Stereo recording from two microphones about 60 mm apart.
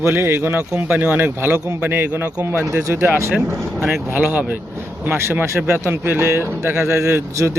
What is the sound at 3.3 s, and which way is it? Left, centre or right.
Speech, centre.